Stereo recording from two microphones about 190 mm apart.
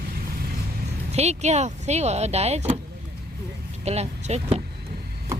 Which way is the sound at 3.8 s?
35° right (ahead or behind).